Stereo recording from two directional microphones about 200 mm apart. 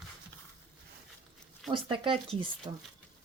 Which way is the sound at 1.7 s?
25° right (ahead or behind).